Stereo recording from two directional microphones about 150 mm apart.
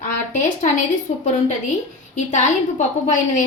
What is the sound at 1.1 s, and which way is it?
Speech, 45° left (ahead or behind).